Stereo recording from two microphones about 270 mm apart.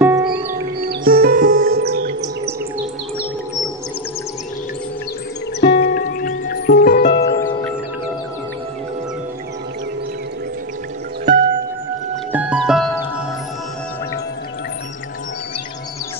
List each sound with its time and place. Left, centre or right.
0.0 s music: centre
0.5 s music: right
5.6 s music: left
12.3 s music: centre